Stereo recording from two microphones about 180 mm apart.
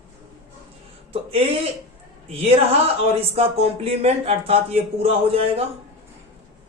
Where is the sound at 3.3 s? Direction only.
35° right (ahead or behind).